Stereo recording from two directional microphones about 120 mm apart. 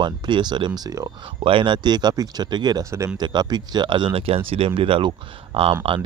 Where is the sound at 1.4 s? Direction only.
45° right (ahead or behind).